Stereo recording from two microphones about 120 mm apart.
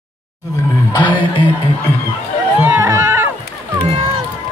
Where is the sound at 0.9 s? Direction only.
45° left (ahead or behind).